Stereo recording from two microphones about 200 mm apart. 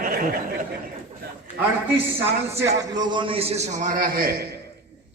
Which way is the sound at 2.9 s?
20° right (ahead or behind).